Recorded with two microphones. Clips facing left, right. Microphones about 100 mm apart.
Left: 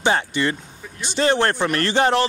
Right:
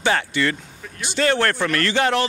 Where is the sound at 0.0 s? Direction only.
20° left (ahead or behind).